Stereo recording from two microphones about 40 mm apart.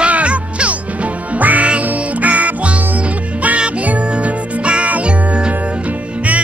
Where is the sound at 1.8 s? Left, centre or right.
Right.